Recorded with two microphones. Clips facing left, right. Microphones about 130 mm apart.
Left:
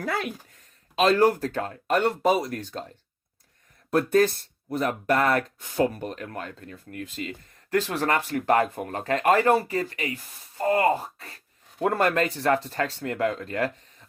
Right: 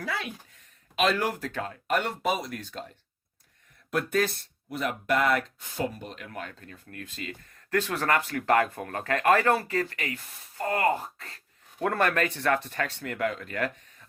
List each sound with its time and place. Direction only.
0.0 s speech: 50° left (ahead or behind)
0.9 s speech: 35° left (ahead or behind)
3.9 s speech: 40° left (ahead or behind)
6.9 s speech: 25° left (ahead or behind)